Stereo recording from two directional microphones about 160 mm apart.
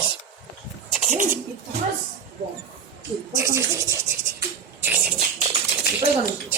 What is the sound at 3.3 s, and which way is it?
Speech, 15° right (ahead or behind).